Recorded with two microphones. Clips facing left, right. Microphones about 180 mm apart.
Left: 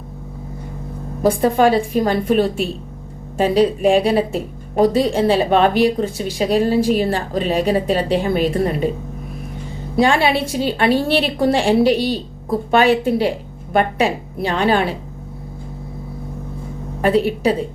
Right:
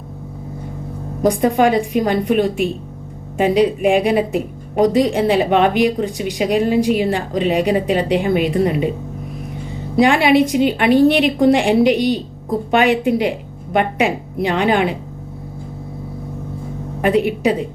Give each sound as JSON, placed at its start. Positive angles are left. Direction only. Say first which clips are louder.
{"t": 1.3, "sound": "a woman's voice", "louder": "even", "side_deg": -15}
{"t": 9.9, "sound": "a woman's voice", "louder": "right 3 dB", "side_deg": -20}
{"t": 17.0, "sound": "a woman's voice", "louder": "even", "side_deg": -15}